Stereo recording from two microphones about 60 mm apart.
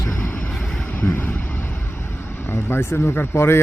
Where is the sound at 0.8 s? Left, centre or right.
Left.